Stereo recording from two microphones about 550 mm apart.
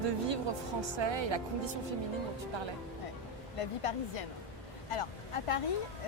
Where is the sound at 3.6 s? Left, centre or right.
Left.